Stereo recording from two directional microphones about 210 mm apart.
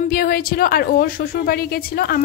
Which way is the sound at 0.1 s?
45° left (ahead or behind).